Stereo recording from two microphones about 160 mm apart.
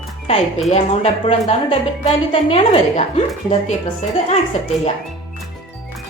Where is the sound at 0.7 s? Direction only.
40° left (ahead or behind).